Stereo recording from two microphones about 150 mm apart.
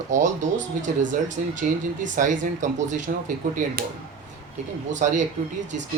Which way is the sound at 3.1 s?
75° right (ahead or behind).